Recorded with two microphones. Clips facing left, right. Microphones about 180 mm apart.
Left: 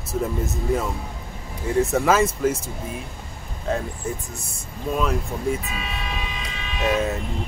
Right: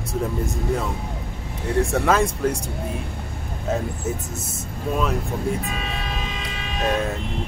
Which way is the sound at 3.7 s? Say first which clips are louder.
Even; 5° right (ahead or behind).